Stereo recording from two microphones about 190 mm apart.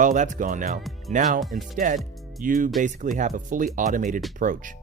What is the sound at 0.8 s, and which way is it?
Music, centre (ahead or behind).